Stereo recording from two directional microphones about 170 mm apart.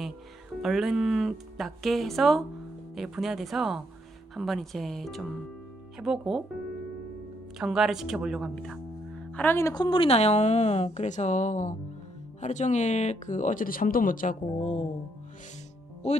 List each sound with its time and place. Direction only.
0.6 s speech: centre (ahead or behind)
7.5 s speech: centre (ahead or behind)
9.3 s a woman's voice: 10° left (ahead or behind); by 14.9 s 45° left (ahead or behind)